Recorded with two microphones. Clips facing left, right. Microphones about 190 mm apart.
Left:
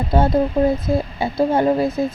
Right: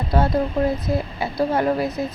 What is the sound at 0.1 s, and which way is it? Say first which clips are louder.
Speech: left 3 dB; 25° left (ahead or behind).